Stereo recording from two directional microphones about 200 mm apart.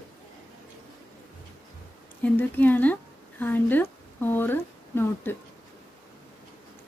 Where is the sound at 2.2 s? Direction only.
10° left (ahead or behind).